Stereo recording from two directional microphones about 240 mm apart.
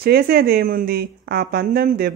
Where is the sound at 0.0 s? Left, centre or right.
Right.